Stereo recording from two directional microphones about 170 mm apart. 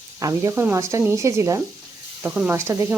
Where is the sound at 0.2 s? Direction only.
20° right (ahead or behind).